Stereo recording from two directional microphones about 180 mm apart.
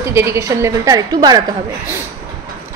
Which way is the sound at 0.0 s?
15° right (ahead or behind).